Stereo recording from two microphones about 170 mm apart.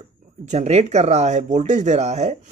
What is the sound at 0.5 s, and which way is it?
Speech, 40° right (ahead or behind).